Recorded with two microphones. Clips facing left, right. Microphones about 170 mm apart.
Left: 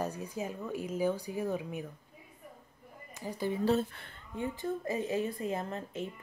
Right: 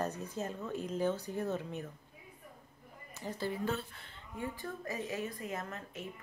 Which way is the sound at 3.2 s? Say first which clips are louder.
Left 4 dB; 15° left (ahead or behind).